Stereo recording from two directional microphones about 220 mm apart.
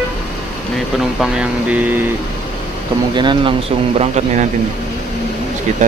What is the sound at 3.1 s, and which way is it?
A man's voice, 20° right (ahead or behind).